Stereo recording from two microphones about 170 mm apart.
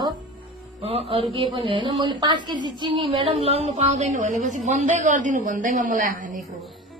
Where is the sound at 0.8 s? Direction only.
35° right (ahead or behind).